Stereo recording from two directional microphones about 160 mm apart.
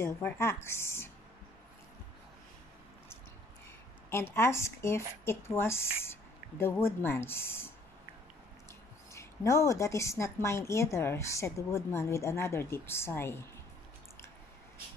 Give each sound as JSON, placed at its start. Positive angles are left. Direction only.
{"t": 0.0, "sound": "a woman's voice", "side_deg": 15}
{"t": 4.1, "sound": "a woman's voice", "side_deg": 15}
{"t": 9.1, "sound": "a woman's voice", "side_deg": 20}